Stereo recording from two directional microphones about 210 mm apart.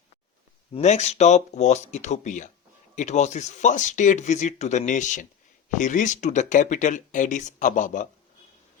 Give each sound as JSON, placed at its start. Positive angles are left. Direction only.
{"t": 0.7, "sound": "speech", "side_deg": 30}